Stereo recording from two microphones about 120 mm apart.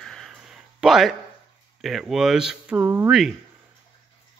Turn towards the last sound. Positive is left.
turn(degrees=-20)  # may be behind; listen again after turning